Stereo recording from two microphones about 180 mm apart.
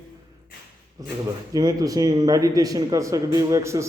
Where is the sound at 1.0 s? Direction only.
20° right (ahead or behind).